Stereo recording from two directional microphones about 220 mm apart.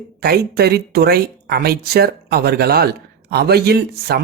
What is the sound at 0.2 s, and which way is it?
Speech, 45° right (ahead or behind).